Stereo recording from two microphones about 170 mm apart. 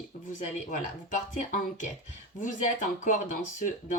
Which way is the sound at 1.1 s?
50° left (ahead or behind).